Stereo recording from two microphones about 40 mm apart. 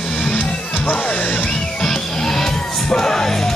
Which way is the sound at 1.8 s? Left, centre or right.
Centre.